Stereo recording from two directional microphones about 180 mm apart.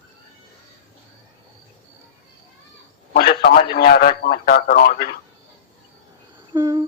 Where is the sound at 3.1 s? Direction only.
60° left (ahead or behind).